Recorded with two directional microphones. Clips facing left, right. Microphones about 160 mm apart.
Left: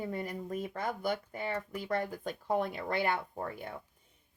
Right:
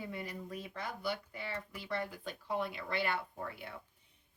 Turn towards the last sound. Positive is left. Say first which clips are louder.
# left 5 dB
turn(degrees=45)  # may be behind; listen again after turning